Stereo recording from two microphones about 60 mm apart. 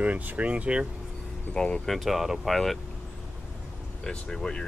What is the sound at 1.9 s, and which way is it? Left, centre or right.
Speech, centre.